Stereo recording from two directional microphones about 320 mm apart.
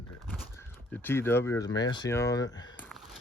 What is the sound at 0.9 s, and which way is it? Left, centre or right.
Speech, centre.